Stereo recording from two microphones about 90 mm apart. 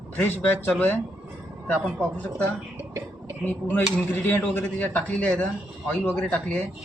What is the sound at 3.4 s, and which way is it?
A man's voice, 25° left (ahead or behind).